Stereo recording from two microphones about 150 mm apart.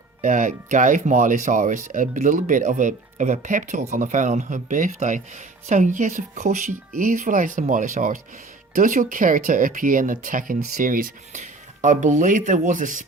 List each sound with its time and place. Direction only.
0.2 s speech: 60° right (ahead or behind)